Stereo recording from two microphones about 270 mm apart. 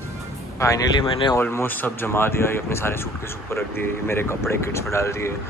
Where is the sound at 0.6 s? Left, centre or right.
Centre.